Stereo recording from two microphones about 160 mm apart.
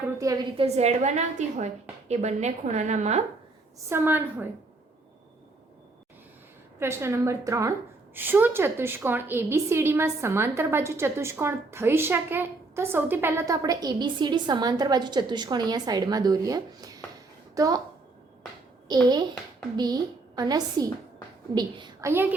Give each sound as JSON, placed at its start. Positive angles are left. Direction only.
{"t": 0.5, "sound": "a woman's voice", "side_deg": -40}
{"t": 3.8, "sound": "a woman's voice", "side_deg": -15}
{"t": 6.7, "sound": "a woman's voice", "side_deg": -15}
{"t": 18.9, "sound": "a child's voice", "side_deg": -25}
{"t": 22.1, "sound": "a woman's voice", "side_deg": -10}